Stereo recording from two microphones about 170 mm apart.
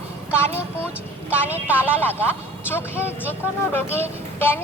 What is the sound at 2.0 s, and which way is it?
Speech, 15° left (ahead or behind).